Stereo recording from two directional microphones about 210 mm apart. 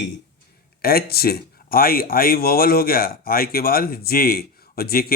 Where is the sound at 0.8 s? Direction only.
45° left (ahead or behind).